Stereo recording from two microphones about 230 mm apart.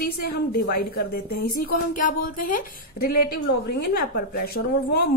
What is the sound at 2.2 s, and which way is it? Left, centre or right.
Speech, left.